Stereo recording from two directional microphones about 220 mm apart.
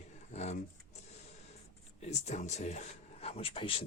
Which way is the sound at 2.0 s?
30° left (ahead or behind).